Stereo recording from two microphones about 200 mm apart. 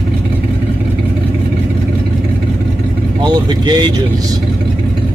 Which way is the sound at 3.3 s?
20° right (ahead or behind).